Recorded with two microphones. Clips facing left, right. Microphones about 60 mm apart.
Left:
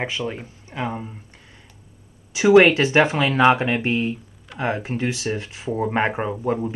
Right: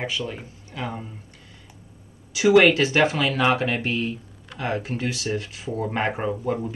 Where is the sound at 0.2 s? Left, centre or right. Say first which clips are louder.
Left 3 dB; centre.